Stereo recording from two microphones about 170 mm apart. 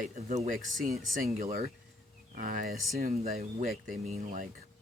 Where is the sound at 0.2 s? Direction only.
45° right (ahead or behind).